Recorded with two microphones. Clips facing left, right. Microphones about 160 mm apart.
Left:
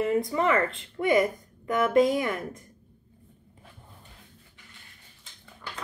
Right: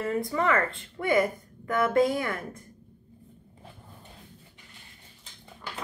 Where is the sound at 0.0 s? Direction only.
20° left (ahead or behind).